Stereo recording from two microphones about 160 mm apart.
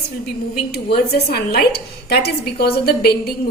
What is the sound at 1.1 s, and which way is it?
A woman's voice, 75° left (ahead or behind).